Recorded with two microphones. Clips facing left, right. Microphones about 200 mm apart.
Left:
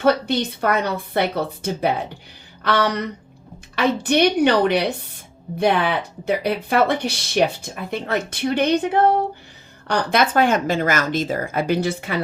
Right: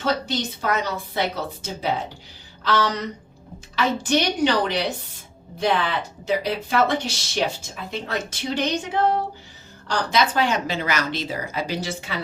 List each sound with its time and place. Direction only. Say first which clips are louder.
0.0 s speech: left 6 dB; 60° left (ahead or behind)